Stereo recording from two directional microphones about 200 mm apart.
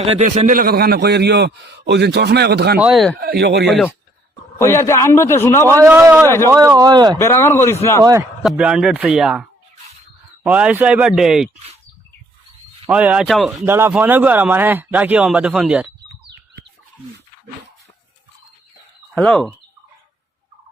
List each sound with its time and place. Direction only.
0.2 s a man's voice: 40° right (ahead or behind)
2.7 s speech: 5° right (ahead or behind)
3.2 s a man's voice: 50° right (ahead or behind)
4.5 s a man's voice: 15° left (ahead or behind)
5.7 s speech: 10° right (ahead or behind)
6.2 s a man's voice: 15° left (ahead or behind)
6.5 s speech: 15° right (ahead or behind)
7.2 s a man's voice: 15° left (ahead or behind)
8.4 s speech: 5° right (ahead or behind)
12.9 s speech: 5° right (ahead or behind)
13.7 s speech: 10° right (ahead or behind)
19.1 s speech: 5° left (ahead or behind)